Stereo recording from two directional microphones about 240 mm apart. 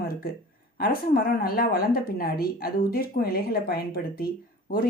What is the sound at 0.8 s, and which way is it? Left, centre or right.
Speech, left.